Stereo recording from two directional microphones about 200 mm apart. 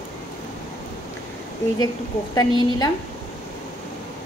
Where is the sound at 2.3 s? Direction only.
20° left (ahead or behind).